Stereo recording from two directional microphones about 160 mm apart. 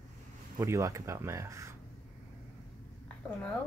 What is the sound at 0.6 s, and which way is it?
Speech, 20° right (ahead or behind).